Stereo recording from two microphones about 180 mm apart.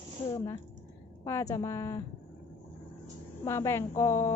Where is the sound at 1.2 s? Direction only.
15° left (ahead or behind).